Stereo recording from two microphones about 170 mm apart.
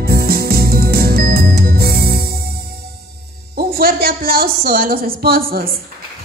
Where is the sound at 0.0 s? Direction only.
60° right (ahead or behind).